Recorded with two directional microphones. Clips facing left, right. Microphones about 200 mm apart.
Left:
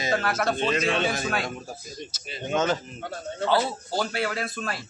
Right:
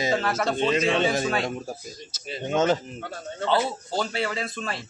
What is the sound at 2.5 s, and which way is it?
Speech, 20° right (ahead or behind).